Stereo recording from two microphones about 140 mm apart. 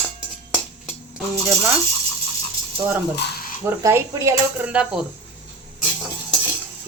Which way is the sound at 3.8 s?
20° right (ahead or behind).